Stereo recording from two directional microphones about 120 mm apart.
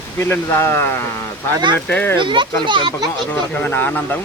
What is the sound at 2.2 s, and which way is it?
Speech, 40° right (ahead or behind).